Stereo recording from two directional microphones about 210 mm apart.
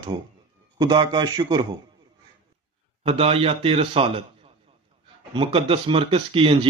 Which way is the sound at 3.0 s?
25° right (ahead or behind).